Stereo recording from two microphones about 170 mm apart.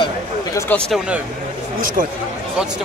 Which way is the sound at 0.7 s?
10° left (ahead or behind).